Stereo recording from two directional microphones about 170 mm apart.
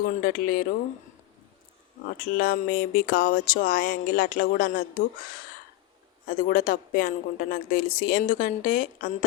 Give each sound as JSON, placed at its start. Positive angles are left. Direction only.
{"t": 0.0, "sound": "speech", "side_deg": 55}
{"t": 2.0, "sound": "speech", "side_deg": 60}